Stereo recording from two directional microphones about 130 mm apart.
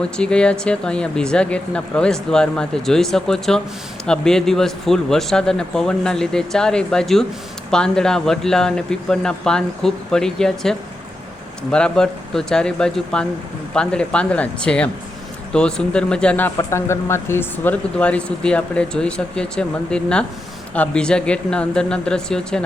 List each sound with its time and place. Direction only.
0.0 s speech: 5° left (ahead or behind)
16.6 s speech: 20° left (ahead or behind); by 22.6 s 5° left (ahead or behind)